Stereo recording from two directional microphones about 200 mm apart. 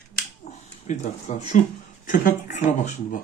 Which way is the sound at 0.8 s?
35° left (ahead or behind).